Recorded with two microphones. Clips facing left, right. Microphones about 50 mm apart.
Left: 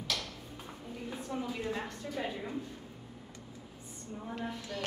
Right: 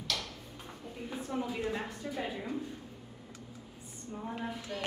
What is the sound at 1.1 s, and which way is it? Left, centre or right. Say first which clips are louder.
Speech: right 2 dB; centre.